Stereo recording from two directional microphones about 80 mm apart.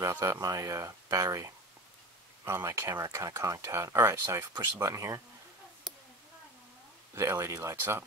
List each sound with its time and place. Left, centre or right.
0.1 s speech: right
2.4 s speech: right
5.9 s a sound: centre
7.2 s speech: right